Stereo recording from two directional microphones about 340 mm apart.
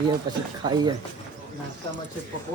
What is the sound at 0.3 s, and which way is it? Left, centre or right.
Speech, centre.